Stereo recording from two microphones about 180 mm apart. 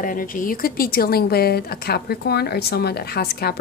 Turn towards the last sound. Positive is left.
turn(degrees=60)  # may be behind; listen again after turning